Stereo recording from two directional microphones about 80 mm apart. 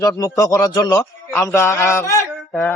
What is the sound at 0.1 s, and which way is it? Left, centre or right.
Speech, left.